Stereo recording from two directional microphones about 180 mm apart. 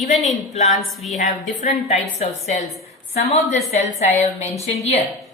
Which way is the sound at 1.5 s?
40° left (ahead or behind).